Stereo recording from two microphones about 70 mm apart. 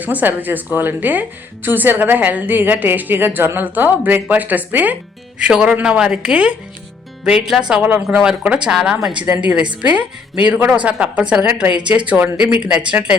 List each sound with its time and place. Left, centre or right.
0.0 s a woman's voice: right
5.4 s a woman's voice: centre
8.0 s a woman's voice: centre